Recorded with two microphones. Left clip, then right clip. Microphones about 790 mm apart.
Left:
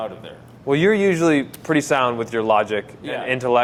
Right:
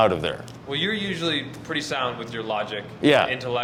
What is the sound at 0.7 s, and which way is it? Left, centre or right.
Speech, left.